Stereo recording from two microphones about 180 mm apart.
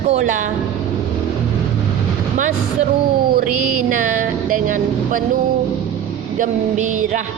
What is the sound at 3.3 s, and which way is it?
Mantra, 55° right (ahead or behind).